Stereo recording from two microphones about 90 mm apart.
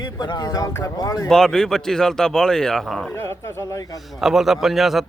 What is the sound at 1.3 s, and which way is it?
A man's voice, 5° left (ahead or behind).